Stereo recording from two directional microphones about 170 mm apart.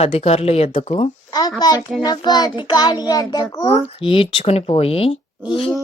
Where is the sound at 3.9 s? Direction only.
30° left (ahead or behind).